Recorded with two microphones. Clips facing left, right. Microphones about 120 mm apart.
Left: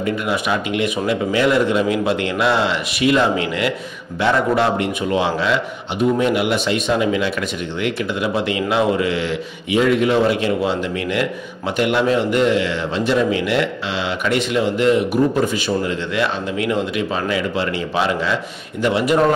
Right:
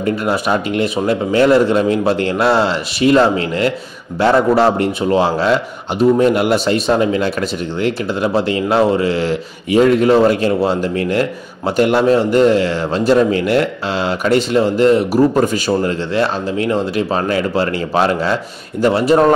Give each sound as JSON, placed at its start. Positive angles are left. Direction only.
{"t": 0.0, "sound": "a man's voice", "side_deg": -40}